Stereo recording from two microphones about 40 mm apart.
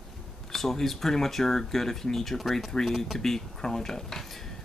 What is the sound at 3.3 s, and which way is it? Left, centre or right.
Speech, centre.